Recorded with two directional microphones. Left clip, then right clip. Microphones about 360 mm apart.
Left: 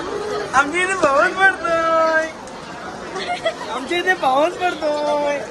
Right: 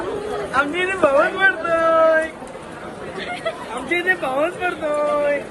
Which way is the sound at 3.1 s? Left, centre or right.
Left.